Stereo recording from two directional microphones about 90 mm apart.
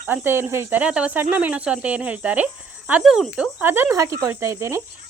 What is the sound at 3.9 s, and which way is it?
Speech, 35° right (ahead or behind).